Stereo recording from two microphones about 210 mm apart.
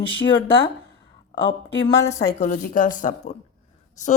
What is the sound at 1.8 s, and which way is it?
Speech, 15° left (ahead or behind).